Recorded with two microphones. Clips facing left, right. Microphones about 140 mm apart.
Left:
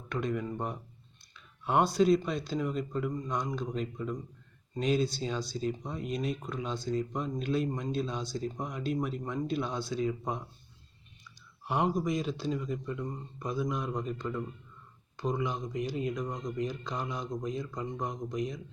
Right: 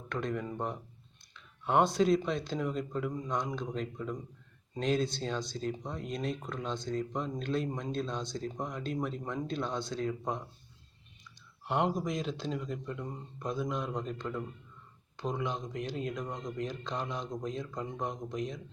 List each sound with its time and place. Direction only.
0.1 s speech: 5° left (ahead or behind)
11.7 s speech: centre (ahead or behind)